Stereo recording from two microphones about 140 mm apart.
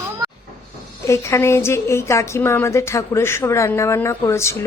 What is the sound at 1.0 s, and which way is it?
A woman's voice, 20° left (ahead or behind).